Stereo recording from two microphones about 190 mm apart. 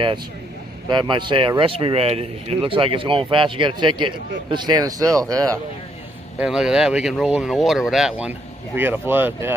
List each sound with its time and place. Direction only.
0.8 s speech: 25° right (ahead or behind)
6.3 s speech: 5° right (ahead or behind)